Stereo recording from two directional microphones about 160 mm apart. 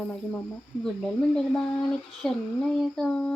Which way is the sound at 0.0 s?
5° left (ahead or behind).